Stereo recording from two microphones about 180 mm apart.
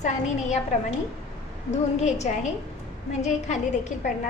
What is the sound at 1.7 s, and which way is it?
A woman's voice, 40° left (ahead or behind).